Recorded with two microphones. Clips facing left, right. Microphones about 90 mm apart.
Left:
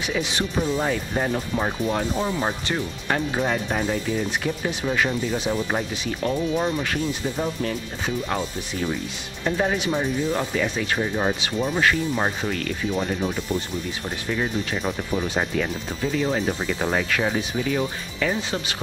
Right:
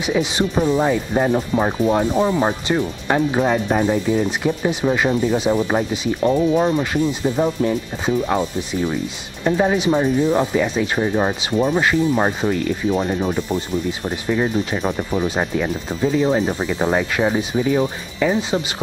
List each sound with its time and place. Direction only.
0.0 s speech: 20° right (ahead or behind)
6.2 s speech: 35° right (ahead or behind)
6.6 s speech: 20° right (ahead or behind)
14.0 s speech: 20° right (ahead or behind)